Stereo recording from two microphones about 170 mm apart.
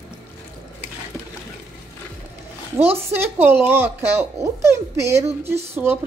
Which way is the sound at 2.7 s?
15° right (ahead or behind).